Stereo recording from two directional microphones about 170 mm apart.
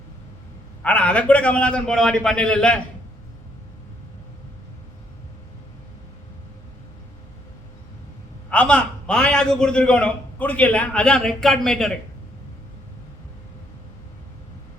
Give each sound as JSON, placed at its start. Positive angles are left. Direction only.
{"t": 0.8, "sound": "a man's voice", "side_deg": 5}
{"t": 8.4, "sound": "a man's voice", "side_deg": 5}